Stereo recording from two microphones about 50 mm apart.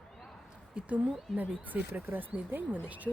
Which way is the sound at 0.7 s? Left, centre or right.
Centre.